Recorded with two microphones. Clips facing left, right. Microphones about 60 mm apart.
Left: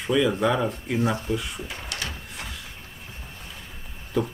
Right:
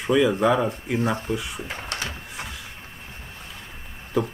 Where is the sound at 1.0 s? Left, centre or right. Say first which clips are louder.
Even; right.